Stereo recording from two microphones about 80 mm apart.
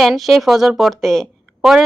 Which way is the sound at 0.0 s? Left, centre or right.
Centre.